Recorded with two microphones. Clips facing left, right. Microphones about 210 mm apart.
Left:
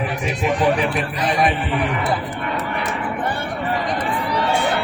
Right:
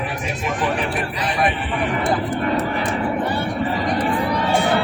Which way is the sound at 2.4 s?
35° right (ahead or behind).